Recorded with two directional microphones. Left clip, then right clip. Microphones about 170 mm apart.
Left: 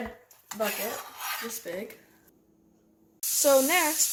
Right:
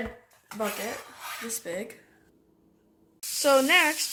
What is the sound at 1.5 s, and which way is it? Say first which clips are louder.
Speech: right 1 dB; 45° right (ahead or behind).